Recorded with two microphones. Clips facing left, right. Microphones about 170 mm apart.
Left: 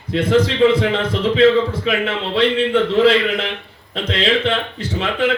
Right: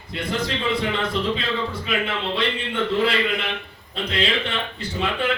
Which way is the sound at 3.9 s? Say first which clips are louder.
Left 6 dB; 90° left.